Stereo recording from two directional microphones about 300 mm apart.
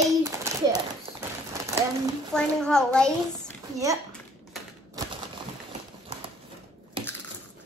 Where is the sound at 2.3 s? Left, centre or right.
Centre.